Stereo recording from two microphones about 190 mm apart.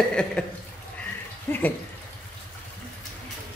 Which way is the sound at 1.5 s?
10° left (ahead or behind).